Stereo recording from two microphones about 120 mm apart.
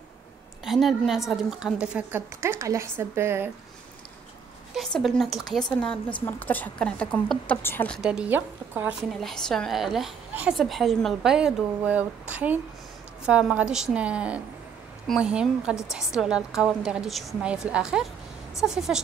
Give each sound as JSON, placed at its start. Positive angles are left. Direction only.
{"t": 0.7, "sound": "a woman's voice", "side_deg": 0}
{"t": 2.4, "sound": "speech", "side_deg": -20}
{"t": 4.7, "sound": "a woman's voice", "side_deg": 5}
{"t": 8.0, "sound": "speech", "side_deg": -10}
{"t": 9.1, "sound": "a woman's voice", "side_deg": 5}